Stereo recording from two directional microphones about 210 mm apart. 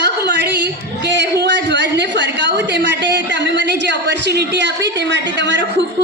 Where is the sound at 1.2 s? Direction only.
55° right (ahead or behind).